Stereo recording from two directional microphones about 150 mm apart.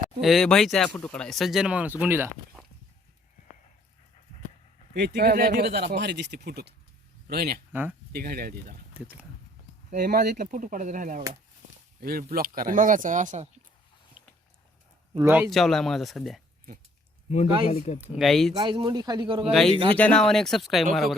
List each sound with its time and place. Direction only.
0.0 s speech: centre (ahead or behind)
4.9 s speech: 90° right
7.7 s speech: 10° right (ahead or behind)
8.1 s speech: 85° right
8.9 s speech: 10° right (ahead or behind)
9.9 s speech: 65° right (ahead or behind)
11.9 s speech: 85° right; by 13.5 s 55° right (ahead or behind)
15.2 s speech: 10° right (ahead or behind)
15.4 s speech: centre (ahead or behind)
17.2 s speech: 50° left (ahead or behind)
18.0 s speech: 5° right (ahead or behind)
18.5 s speech: 30° right (ahead or behind)
19.5 s speech: centre (ahead or behind)